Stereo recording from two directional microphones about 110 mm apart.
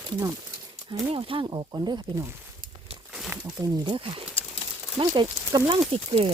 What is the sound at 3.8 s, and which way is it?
Speech, 55° right (ahead or behind).